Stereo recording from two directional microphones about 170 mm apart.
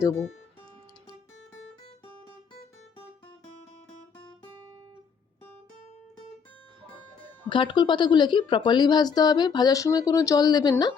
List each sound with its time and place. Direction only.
7.5 s a woman's voice: 30° left (ahead or behind)